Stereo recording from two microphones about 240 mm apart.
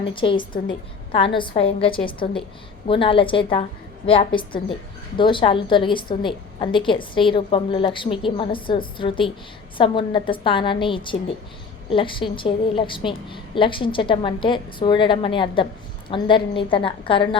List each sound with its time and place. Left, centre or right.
0.0 s a woman's voice: left